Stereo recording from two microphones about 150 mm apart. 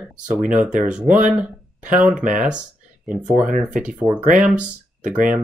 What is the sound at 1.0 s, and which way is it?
Speech, 60° right (ahead or behind).